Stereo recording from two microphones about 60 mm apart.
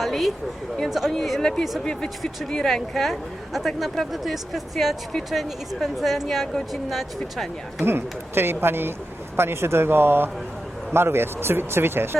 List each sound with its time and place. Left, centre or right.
0.0 s a woman's voice: centre
7.9 s speech: right